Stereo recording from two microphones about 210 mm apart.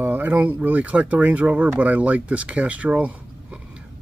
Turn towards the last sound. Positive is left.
turn(degrees=-5)  # may be behind; listen again after turning